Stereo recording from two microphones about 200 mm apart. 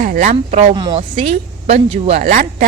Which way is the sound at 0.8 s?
20° right (ahead or behind).